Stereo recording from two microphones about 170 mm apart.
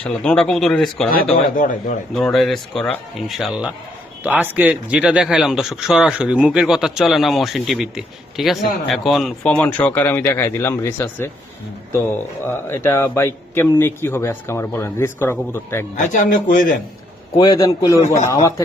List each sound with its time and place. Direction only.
0.0 s speech: 5° left (ahead or behind)
1.5 s speech: 50° left (ahead or behind)
2.1 s speech: centre (ahead or behind)
12.5 s a man's voice: 15° left (ahead or behind)
16.0 s speech: 50° left (ahead or behind)
17.3 s a man's voice: 25° left (ahead or behind)